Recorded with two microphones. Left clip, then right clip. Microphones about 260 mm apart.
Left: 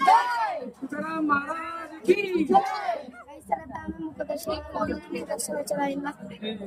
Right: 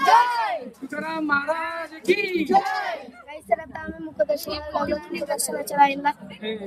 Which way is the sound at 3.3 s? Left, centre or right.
Centre.